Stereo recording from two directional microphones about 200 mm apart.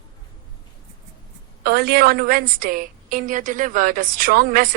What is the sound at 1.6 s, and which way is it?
A woman's voice, 50° right (ahead or behind).